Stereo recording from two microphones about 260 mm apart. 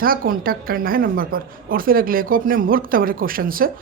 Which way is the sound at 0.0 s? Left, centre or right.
Right.